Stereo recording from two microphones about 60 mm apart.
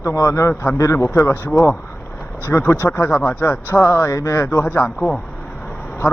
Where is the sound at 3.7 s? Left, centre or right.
Left.